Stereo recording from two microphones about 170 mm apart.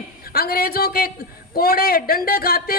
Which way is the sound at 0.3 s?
60° left (ahead or behind).